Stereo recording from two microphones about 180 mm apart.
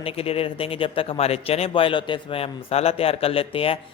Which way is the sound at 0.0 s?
35° left (ahead or behind).